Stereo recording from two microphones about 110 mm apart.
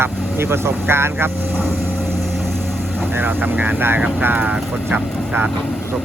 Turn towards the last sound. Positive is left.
turn(degrees=-15)  # may be behind; listen again after turning